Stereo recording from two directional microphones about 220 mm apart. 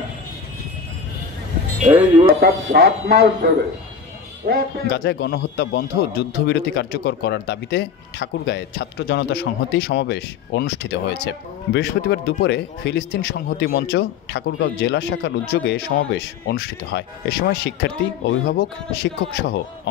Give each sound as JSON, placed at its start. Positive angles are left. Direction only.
{"t": 1.9, "sound": "speech", "side_deg": -15}
{"t": 2.2, "sound": "speech", "side_deg": -45}
{"t": 4.9, "sound": "a man's voice", "side_deg": 50}